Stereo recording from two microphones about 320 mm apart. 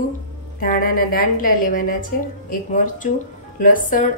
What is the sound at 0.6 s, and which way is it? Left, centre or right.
A woman's voice, left.